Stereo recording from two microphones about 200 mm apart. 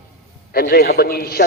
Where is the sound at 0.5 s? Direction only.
50° left (ahead or behind).